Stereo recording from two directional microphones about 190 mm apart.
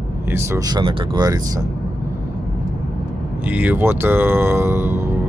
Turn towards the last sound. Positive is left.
turn(degrees=-10)  # may be behind; listen again after turning